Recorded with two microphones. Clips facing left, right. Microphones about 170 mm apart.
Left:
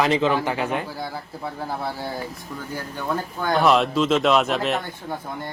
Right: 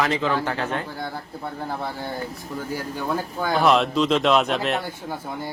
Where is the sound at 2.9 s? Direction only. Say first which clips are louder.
Left 1 dB; 10° right (ahead or behind).